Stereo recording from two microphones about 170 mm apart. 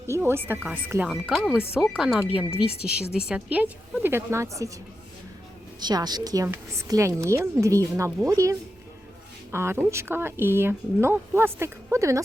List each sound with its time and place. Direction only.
0.1 s a woman's voice: 15° right (ahead or behind)
5.8 s a woman's voice: 25° right (ahead or behind)